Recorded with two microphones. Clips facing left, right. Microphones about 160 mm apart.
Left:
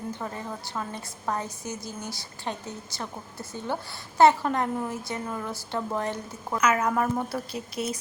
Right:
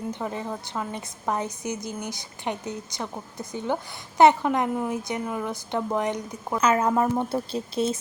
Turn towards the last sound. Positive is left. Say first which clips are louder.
# right 6 dB
turn(degrees=-25)  # may be behind; listen again after turning